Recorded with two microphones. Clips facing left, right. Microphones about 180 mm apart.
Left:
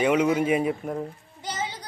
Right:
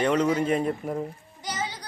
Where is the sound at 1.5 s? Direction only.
25° left (ahead or behind).